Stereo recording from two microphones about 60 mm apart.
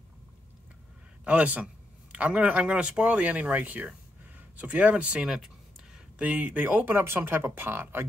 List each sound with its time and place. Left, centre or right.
1.2 s speech: right